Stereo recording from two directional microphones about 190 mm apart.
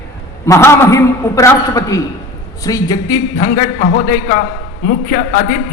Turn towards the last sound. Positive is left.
turn(degrees=45)  # may be behind; listen again after turning